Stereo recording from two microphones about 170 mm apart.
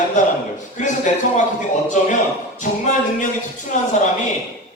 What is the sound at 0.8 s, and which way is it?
Speech, 45° left (ahead or behind).